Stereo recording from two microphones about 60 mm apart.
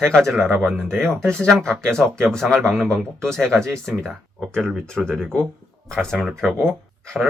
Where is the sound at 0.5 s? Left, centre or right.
Right.